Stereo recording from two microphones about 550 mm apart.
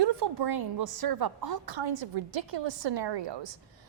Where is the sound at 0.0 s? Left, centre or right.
Right.